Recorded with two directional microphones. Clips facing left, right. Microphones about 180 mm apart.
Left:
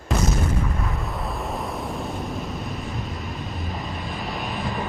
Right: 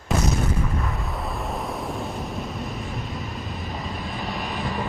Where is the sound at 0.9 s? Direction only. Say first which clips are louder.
Left 1 dB; centre (ahead or behind).